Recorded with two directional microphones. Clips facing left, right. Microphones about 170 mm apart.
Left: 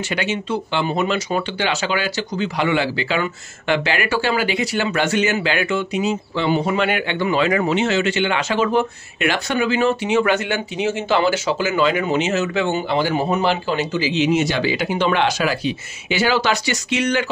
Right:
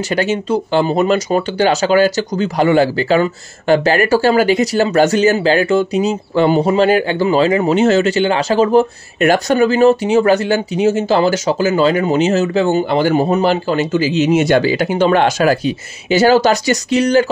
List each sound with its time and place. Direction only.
0.1 s speech: 40° right (ahead or behind)